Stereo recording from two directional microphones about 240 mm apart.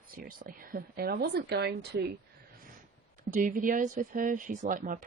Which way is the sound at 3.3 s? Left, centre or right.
Right.